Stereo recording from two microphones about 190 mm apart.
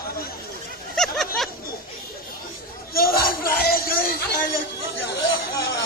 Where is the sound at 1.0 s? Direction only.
Centre (ahead or behind).